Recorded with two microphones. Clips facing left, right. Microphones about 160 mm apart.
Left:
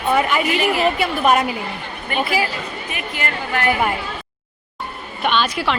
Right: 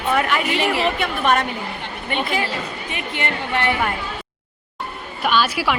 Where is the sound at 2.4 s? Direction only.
25° right (ahead or behind).